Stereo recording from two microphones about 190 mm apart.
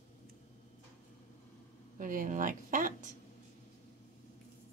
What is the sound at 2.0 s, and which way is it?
Speech, 45° right (ahead or behind).